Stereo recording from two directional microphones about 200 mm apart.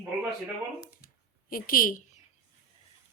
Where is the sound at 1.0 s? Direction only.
45° left (ahead or behind).